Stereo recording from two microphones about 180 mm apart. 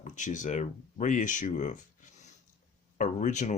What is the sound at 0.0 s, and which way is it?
Speech, 45° left (ahead or behind).